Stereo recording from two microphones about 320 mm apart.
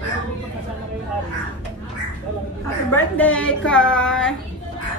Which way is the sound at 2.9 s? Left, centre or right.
Centre.